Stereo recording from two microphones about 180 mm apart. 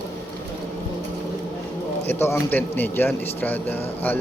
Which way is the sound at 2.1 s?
10° left (ahead or behind).